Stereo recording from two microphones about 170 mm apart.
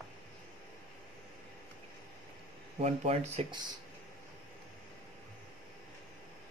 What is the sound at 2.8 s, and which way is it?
Speech, 40° right (ahead or behind).